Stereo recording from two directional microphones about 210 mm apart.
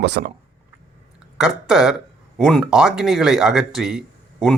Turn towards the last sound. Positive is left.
turn(degrees=0)  # may be behind; listen again after turning